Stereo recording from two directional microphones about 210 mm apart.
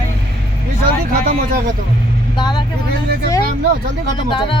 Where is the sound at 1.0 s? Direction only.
40° right (ahead or behind).